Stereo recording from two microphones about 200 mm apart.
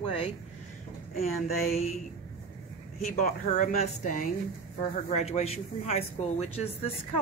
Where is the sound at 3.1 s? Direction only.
40° left (ahead or behind).